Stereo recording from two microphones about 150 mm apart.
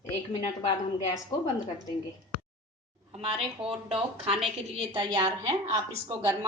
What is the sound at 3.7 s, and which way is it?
A woman's voice, 40° right (ahead or behind).